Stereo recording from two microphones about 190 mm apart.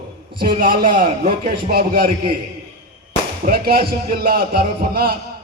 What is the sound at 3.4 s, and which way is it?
A man's voice, 50° right (ahead or behind).